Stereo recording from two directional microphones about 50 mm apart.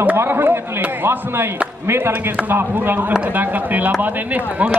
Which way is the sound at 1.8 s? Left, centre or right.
Right.